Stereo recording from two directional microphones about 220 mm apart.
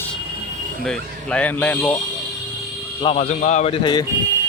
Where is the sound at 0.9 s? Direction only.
5° left (ahead or behind).